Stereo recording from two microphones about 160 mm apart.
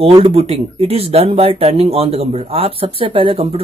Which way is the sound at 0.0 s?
35° right (ahead or behind).